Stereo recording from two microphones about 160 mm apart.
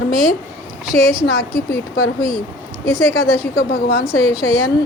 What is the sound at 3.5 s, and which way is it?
Speech, 80° left.